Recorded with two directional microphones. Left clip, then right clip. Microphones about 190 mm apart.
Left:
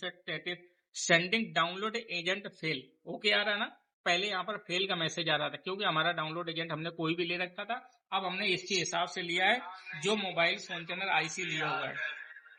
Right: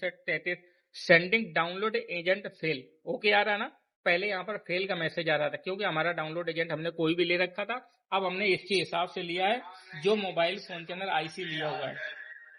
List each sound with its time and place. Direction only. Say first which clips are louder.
0.0 s a man's voice: right 6 dB; 25° right (ahead or behind)